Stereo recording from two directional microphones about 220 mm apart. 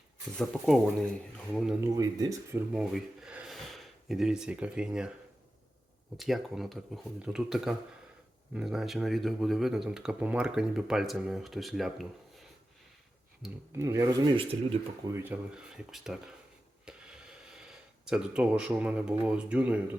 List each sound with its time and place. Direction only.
0.5 s speech: 5° left (ahead or behind)
2.0 s speech: 15° right (ahead or behind)
2.7 s speech: 5° right (ahead or behind)
6.1 s speech: centre (ahead or behind)
13.7 s speech: 15° right (ahead or behind)
15.1 s speech: 10° right (ahead or behind)